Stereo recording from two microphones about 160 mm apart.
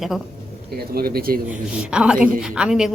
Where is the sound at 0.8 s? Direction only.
70° right (ahead or behind).